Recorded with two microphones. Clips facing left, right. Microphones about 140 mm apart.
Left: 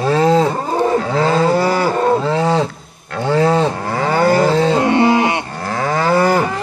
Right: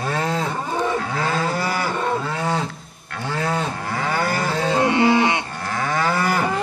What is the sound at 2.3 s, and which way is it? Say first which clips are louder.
Wild animals: left 8 dB; 90° left.